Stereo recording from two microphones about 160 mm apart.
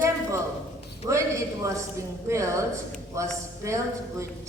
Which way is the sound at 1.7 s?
20° right (ahead or behind).